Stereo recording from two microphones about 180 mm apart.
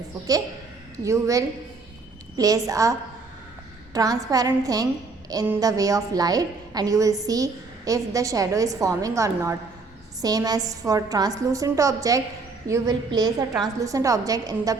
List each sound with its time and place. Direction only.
1.0 s a woman's voice: 15° right (ahead or behind)
3.9 s a woman's voice: 20° right (ahead or behind)